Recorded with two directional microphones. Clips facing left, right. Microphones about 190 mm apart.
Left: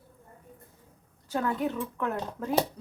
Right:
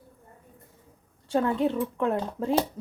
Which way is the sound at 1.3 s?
30° right (ahead or behind).